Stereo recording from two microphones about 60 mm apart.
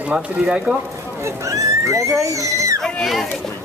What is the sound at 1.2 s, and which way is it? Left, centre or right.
Speech, right.